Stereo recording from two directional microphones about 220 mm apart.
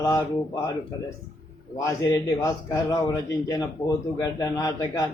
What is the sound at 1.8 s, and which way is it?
Speech, 15° left (ahead or behind).